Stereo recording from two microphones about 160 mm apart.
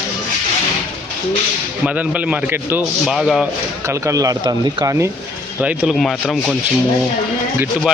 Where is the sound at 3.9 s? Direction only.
20° right (ahead or behind).